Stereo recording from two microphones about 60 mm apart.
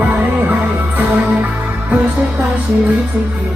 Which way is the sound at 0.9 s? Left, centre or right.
Right.